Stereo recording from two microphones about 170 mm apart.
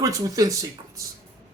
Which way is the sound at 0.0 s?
20° right (ahead or behind).